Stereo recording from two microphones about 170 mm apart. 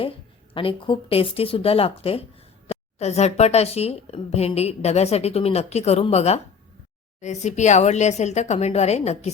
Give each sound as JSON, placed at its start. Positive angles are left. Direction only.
{"t": 0.5, "sound": "a woman's voice", "side_deg": 30}